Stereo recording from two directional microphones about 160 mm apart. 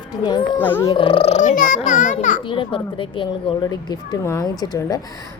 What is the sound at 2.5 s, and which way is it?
Speech, 35° left (ahead or behind).